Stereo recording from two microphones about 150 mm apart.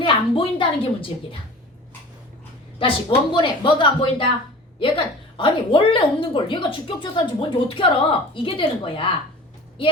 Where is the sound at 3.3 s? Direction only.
30° left (ahead or behind).